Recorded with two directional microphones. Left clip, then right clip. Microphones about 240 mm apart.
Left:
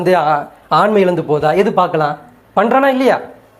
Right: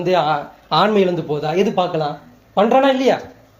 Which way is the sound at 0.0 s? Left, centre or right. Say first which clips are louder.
Left 4 dB; centre.